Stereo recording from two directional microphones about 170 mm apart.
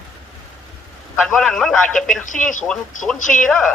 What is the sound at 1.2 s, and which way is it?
Speech, 5° left (ahead or behind).